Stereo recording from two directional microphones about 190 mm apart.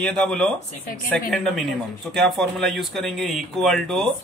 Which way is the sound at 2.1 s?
Centre (ahead or behind).